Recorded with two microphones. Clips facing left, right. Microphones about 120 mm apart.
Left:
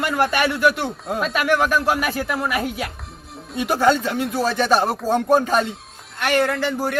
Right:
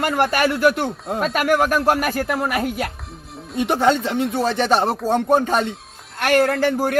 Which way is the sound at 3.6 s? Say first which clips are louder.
Even; 25° right (ahead or behind).